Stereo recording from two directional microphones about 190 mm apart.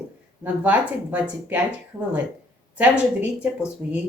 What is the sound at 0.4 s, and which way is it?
Speech, 10° right (ahead or behind).